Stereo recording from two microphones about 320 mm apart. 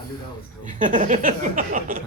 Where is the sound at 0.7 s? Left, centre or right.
Right.